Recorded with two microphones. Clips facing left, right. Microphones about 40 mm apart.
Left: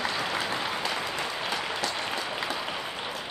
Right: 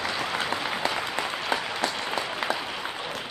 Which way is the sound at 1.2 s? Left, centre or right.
Right.